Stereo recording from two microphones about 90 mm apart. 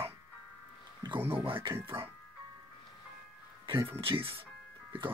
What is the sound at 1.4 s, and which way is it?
Speech, 70° right (ahead or behind).